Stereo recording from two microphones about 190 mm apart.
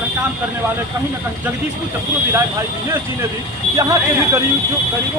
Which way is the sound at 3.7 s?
20° right (ahead or behind).